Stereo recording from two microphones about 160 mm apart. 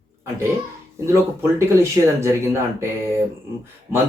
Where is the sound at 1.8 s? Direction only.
15° right (ahead or behind).